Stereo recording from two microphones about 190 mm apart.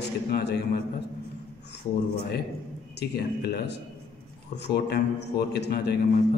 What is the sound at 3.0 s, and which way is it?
A man's voice, 60° left (ahead or behind).